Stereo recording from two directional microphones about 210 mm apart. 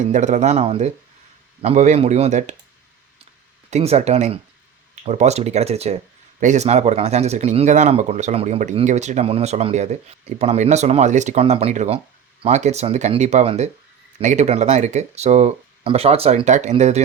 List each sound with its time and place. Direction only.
0.0 s speech: 35° right (ahead or behind)
3.7 s speech: 30° right (ahead or behind)